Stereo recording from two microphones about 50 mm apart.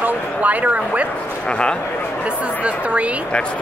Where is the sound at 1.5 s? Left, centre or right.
Left.